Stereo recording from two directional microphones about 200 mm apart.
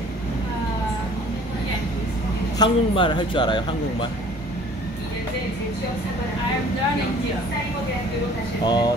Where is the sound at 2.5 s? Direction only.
25° left (ahead or behind).